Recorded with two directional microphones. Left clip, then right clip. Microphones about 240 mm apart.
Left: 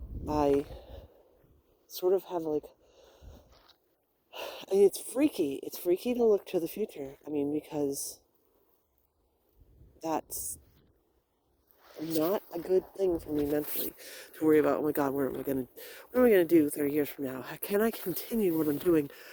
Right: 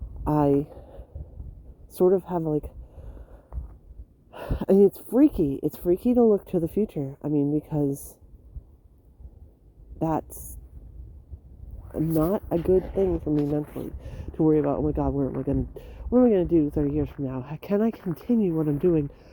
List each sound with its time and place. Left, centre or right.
0.3 s a sound: centre
4.3 s speech: centre
10.0 s speech: centre
12.2 s speech: centre
13.3 s speech: centre